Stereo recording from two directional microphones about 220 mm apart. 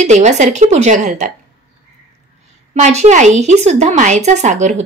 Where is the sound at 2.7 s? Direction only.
30° right (ahead or behind).